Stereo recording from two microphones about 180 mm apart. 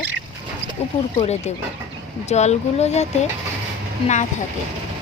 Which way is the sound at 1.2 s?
35° left (ahead or behind).